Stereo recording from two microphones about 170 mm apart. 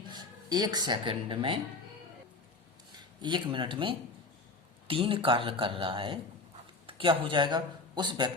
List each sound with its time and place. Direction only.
0.1 s speech: 25° right (ahead or behind)
3.2 s speech: 25° right (ahead or behind)